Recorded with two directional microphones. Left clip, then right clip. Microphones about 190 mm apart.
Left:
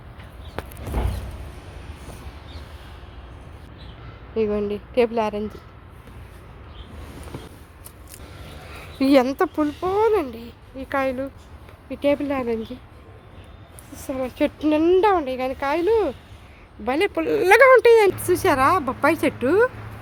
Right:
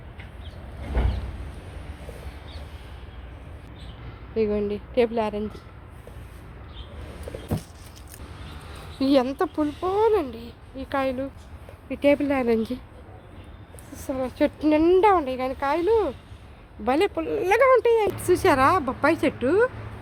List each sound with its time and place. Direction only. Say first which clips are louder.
4.4 s speech: left 2 dB; 10° left (ahead or behind)
9.0 s speech: left 4 dB; 25° left (ahead or behind)
11.9 s speech: right 1 dB; 10° right (ahead or behind)
12.5 s a woman's voice: right 3 dB; 30° right (ahead or behind)
14.1 s speech: left 1 dB; 5° left (ahead or behind); by 16.1 s 20° left (ahead or behind)
16.8 s speech: even; 5° right (ahead or behind)
17.2 s speech: left 6 dB; 45° left (ahead or behind)
18.1 s speech: even; centre (ahead or behind)